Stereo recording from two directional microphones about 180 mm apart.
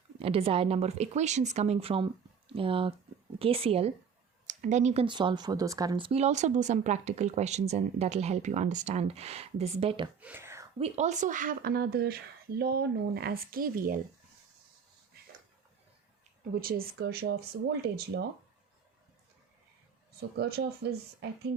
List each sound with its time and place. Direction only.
0.2 s speech: 30° right (ahead or behind)
5.0 s speech: 25° right (ahead or behind)
6.1 s speech: 35° right (ahead or behind)
10.2 s whispering: 10° right (ahead or behind)
10.8 s speech: 35° right (ahead or behind); by 14.0 s 50° right (ahead or behind)
16.6 s speech: 55° right (ahead or behind)
20.3 s speech: 65° right (ahead or behind)